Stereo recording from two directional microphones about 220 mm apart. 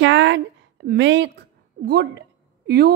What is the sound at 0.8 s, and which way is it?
A woman's voice, 55° right (ahead or behind).